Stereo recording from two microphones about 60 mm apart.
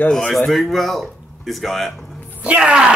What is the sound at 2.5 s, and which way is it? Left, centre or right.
Speech, centre.